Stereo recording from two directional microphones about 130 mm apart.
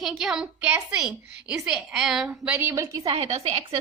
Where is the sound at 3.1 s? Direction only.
50° right (ahead or behind).